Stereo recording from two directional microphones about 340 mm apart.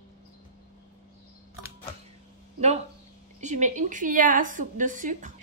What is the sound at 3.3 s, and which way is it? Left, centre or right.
A woman's voice, right.